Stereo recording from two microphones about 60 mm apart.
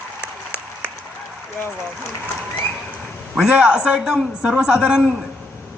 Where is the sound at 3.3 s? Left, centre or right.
Centre.